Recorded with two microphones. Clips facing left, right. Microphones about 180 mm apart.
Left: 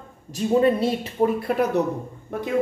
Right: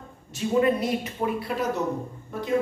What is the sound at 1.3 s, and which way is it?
Speech, 50° left (ahead or behind).